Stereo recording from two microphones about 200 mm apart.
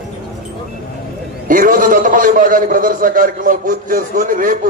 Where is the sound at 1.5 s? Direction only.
45° right (ahead or behind).